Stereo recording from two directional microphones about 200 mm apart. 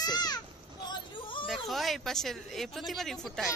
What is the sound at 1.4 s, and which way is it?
Speech, centre (ahead or behind).